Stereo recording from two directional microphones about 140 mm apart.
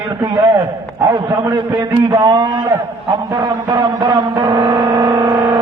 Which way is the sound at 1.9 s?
30° right (ahead or behind).